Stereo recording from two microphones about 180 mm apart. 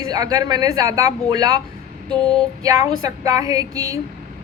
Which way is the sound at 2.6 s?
20° right (ahead or behind).